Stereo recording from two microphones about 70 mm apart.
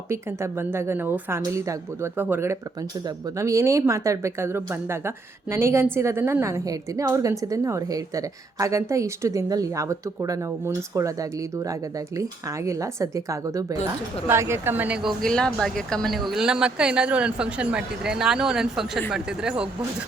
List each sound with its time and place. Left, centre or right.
0.1 s a woman's voice: right
1.5 s speech: right
2.1 s a woman's voice: right
3.3 s a woman's voice: right
14.3 s a woman's voice: right
14.8 s speech: centre
15.2 s speech: centre